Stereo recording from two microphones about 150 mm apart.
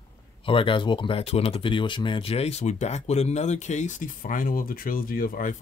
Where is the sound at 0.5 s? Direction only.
35° left (ahead or behind).